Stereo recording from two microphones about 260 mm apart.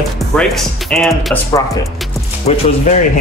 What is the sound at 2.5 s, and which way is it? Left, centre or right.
Speech, left.